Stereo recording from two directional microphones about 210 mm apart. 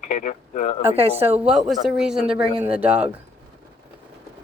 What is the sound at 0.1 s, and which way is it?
Speech, 35° left (ahead or behind).